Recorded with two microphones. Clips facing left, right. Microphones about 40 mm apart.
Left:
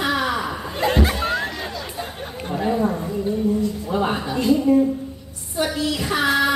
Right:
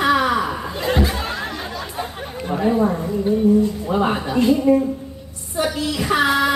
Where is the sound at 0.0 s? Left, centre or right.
Centre.